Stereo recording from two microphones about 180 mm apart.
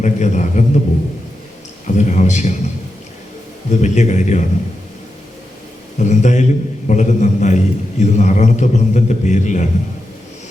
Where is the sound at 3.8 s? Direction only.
40° left (ahead or behind).